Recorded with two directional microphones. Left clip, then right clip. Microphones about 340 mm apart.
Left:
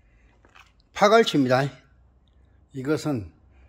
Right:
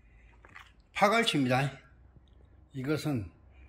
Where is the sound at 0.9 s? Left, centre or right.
Centre.